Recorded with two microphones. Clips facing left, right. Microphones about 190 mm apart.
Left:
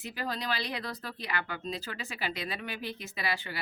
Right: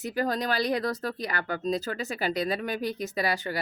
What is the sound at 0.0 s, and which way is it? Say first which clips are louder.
Speech: right 8 dB; 45° right (ahead or behind).